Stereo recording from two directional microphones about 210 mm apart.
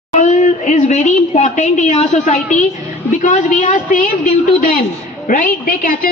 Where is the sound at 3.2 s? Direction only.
35° left (ahead or behind).